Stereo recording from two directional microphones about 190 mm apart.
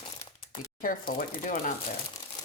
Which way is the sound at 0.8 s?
45° left (ahead or behind).